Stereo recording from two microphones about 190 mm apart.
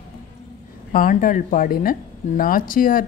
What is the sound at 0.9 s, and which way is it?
Speech, 45° left (ahead or behind).